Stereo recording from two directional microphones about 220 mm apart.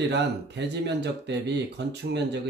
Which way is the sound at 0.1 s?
50° right (ahead or behind).